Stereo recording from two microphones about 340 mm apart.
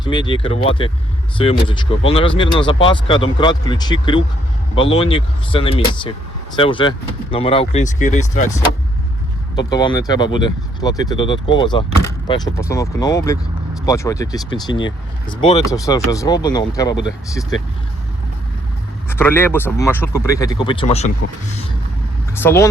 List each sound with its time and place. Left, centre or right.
0.0 s speech: centre
9.6 s speech: centre
19.0 s speech: centre
22.4 s speech: centre